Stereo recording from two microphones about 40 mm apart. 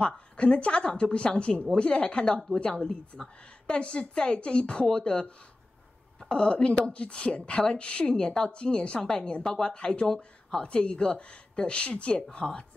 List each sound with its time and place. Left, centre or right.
0.0 s speech: left
10.0 s speech: centre
10.6 s speech: left